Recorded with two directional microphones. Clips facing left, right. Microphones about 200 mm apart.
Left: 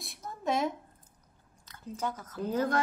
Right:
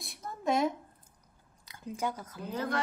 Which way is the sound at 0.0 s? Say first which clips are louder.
Right 1 dB; centre (ahead or behind).